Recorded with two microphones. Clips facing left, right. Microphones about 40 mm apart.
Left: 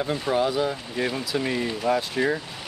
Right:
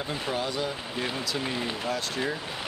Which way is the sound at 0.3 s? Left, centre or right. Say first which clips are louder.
Left 8 dB; centre.